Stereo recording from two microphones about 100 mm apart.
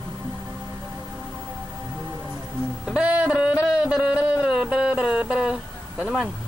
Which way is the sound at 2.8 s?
10° right (ahead or behind).